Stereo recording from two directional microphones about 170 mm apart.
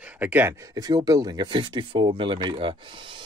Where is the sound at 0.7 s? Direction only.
20° right (ahead or behind).